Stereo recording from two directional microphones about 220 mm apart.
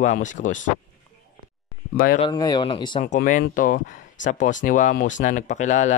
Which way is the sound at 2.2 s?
20° left (ahead or behind).